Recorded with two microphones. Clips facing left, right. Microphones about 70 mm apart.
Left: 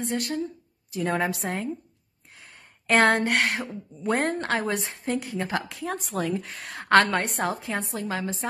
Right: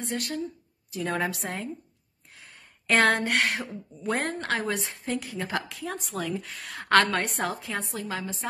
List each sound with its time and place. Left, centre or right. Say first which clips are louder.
0.0 s a woman's voice: left 3 dB; left